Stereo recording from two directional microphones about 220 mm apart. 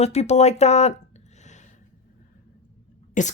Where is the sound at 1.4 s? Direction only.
35° left (ahead or behind).